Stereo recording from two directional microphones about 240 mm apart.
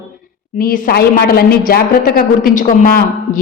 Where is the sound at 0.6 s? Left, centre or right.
Left.